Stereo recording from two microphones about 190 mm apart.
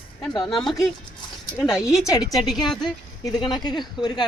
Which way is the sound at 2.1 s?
20° left (ahead or behind).